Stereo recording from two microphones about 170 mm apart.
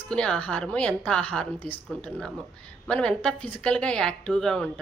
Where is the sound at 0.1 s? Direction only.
5° left (ahead or behind).